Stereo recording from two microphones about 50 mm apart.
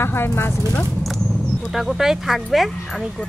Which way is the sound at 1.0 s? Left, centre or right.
Centre.